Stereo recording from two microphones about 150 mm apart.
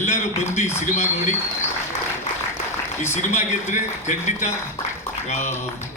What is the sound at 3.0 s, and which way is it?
A man's voice, 50° left (ahead or behind).